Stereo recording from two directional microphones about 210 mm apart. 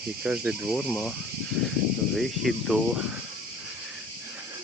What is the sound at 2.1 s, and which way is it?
Speech, centre (ahead or behind).